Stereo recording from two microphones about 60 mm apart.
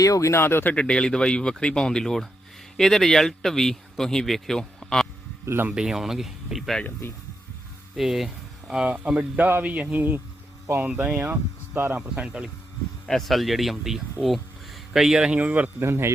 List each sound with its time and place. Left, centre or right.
0.0 s speech: left
0.7 s a man's voice: centre
5.7 s speech: centre
7.0 s speech: left
7.9 s speech: centre
9.6 s a man's voice: right
11.9 s speech: centre
13.1 s speech: centre
15.4 s a man's voice: right
15.8 s speech: right